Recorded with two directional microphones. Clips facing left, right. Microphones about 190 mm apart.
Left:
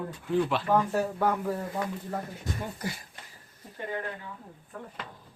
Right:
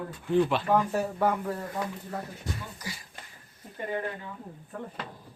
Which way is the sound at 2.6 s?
55° left (ahead or behind).